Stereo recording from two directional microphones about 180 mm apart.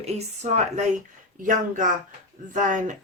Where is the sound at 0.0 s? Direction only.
40° right (ahead or behind).